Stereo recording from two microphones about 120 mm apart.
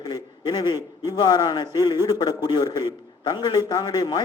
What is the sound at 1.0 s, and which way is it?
A man's voice, 35° left (ahead or behind).